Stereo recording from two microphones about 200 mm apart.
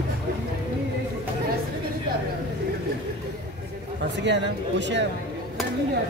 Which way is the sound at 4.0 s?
60° right (ahead or behind).